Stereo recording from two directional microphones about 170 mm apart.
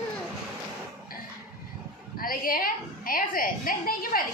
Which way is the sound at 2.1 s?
60° left (ahead or behind).